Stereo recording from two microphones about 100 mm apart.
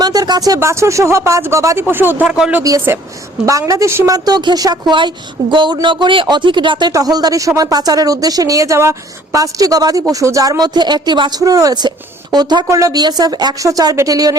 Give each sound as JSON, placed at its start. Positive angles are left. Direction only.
{"t": 0.0, "sound": "a sound", "side_deg": -40}
{"t": 0.6, "sound": "speech", "side_deg": -30}
{"t": 2.7, "sound": "speech", "side_deg": -35}
{"t": 4.1, "sound": "a woman's voice", "side_deg": -45}
{"t": 6.9, "sound": "speech", "side_deg": -40}
{"t": 12.6, "sound": "speech", "side_deg": -30}